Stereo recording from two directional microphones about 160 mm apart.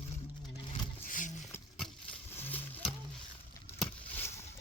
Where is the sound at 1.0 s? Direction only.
55° left (ahead or behind).